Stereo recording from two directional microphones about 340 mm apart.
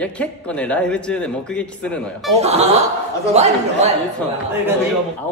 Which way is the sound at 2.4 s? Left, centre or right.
Centre.